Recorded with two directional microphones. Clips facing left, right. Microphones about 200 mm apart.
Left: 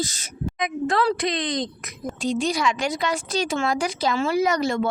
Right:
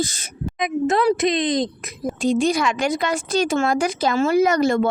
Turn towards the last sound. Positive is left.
turn(degrees=-50)  # may be behind; listen again after turning